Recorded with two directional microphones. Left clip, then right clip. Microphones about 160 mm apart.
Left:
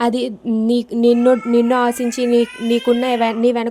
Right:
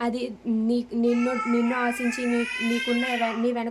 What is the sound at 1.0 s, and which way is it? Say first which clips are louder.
A child's voice: left 12 dB; 50° left (ahead or behind).